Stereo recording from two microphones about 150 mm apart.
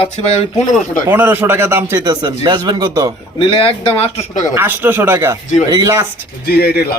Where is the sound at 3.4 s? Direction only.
40° left (ahead or behind).